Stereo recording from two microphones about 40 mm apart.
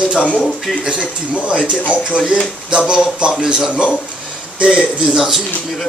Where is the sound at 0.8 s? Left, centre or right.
Right.